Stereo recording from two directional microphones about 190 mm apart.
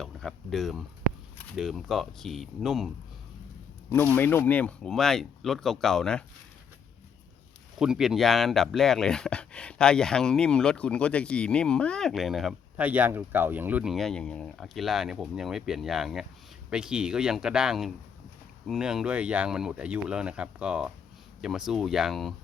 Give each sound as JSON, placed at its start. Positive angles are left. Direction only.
{"t": 0.0, "sound": "speech", "side_deg": 0}
{"t": 3.9, "sound": "speech", "side_deg": 10}
{"t": 7.8, "sound": "speech", "side_deg": -5}